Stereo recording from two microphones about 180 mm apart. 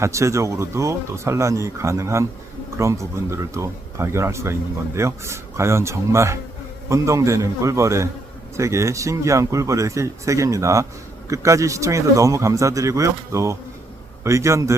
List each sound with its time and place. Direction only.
0.0 s speech: 15° right (ahead or behind)